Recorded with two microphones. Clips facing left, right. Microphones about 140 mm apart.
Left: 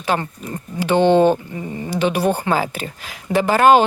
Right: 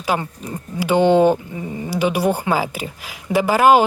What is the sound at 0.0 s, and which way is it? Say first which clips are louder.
Speech: even; 10° right (ahead or behind).